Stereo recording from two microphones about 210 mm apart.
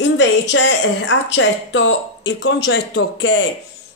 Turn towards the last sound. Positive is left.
turn(degrees=60)  # may be behind; listen again after turning